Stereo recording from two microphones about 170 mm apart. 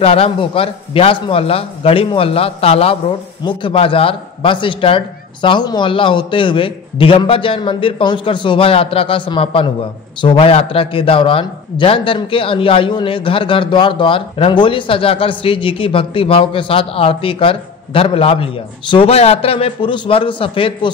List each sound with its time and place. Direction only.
0.0 s a man's voice: 35° left (ahead or behind)